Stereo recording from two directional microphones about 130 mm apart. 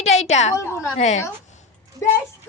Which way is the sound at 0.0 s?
60° left (ahead or behind).